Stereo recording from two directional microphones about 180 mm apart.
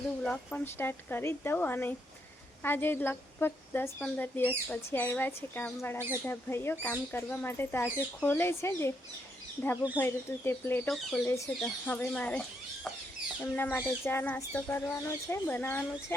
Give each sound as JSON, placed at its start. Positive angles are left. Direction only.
{"t": 0.3, "sound": "a woman's voice", "side_deg": 10}
{"t": 10.0, "sound": "a woman's voice", "side_deg": 15}
{"t": 10.8, "sound": "speech", "side_deg": 0}
{"t": 11.3, "sound": "a woman's voice", "side_deg": 15}